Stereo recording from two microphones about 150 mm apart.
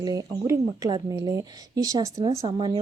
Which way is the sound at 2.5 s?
35° right (ahead or behind).